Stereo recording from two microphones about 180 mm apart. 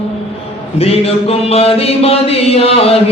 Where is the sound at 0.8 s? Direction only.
35° left (ahead or behind).